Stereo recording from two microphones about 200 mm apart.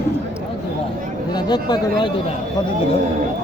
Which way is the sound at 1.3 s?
20° left (ahead or behind).